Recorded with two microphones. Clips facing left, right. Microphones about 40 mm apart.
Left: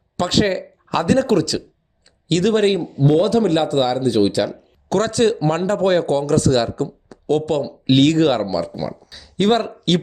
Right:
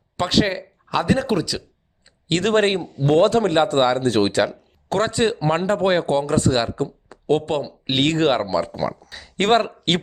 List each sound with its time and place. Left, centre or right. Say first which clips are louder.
0.3 s speech: left 2 dB; centre
2.2 s speech: left 3 dB; right
2.5 s a man's voice: left 1 dB; right
4.0 s speech: left 2 dB; right
4.9 s a man's voice: left 3 dB; right
8.9 s a man's voice: right 1 dB; right